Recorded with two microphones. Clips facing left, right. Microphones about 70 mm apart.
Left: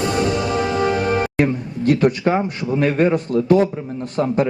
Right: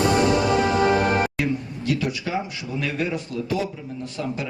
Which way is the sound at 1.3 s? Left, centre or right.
Left.